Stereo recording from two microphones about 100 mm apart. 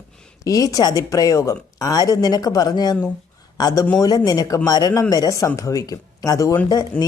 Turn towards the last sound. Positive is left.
turn(degrees=15)  # may be behind; listen again after turning